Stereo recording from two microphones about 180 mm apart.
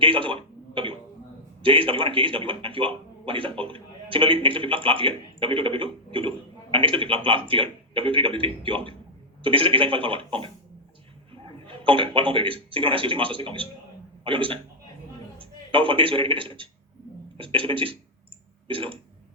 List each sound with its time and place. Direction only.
0.0 s a man's voice: 30° right (ahead or behind)